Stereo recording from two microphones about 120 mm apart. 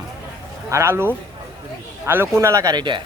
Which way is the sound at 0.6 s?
20° right (ahead or behind).